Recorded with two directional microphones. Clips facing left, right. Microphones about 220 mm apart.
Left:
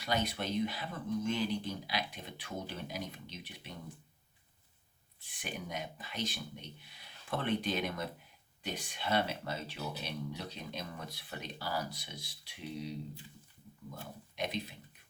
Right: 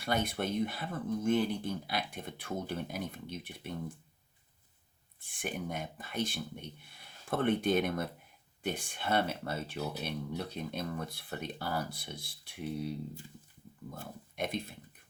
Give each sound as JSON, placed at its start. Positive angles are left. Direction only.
{"t": 0.0, "sound": "speech", "side_deg": -50}
{"t": 5.2, "sound": "speech", "side_deg": -50}
{"t": 13.9, "sound": "speech", "side_deg": -50}